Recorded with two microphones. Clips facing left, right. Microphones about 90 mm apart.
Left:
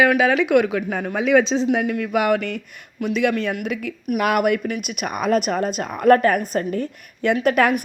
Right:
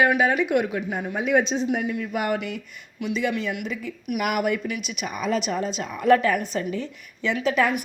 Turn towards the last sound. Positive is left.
turn(degrees=60)  # may be behind; listen again after turning